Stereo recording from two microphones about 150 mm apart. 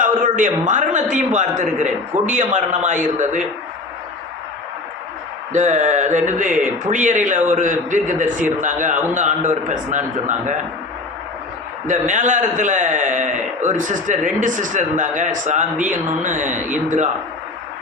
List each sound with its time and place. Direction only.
0.2 s a man's voice: 60° right (ahead or behind)
5.5 s a man's voice: 55° right (ahead or behind)
11.9 s a man's voice: 55° right (ahead or behind)